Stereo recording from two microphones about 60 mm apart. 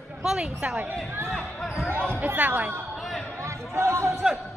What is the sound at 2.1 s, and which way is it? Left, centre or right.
Speech, right.